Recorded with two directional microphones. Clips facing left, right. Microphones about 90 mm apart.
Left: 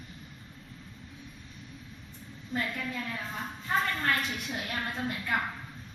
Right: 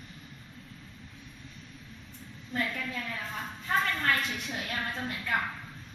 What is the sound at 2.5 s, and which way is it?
A woman's voice, 10° left (ahead or behind).